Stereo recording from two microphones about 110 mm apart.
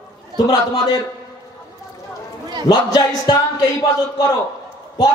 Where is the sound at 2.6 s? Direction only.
40° left (ahead or behind).